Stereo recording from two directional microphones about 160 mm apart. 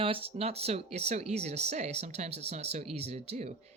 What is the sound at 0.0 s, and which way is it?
Speech, 35° right (ahead or behind).